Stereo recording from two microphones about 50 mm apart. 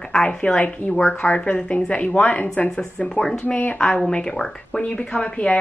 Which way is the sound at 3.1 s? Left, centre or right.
Centre.